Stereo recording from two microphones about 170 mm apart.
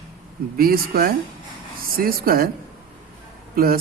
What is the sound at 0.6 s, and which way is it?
Speech, 60° right (ahead or behind).